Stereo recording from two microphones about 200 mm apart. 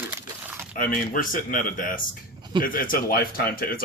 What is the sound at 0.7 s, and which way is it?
Speech, 45° left (ahead or behind).